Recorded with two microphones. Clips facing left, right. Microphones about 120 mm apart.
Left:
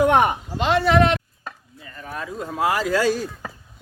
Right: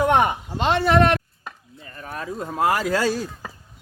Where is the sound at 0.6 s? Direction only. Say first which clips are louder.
Left 1 dB; 30° right (ahead or behind).